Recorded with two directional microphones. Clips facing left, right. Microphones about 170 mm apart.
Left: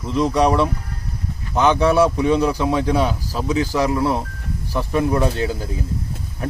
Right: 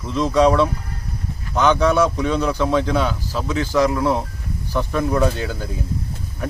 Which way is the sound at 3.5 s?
35° left (ahead or behind).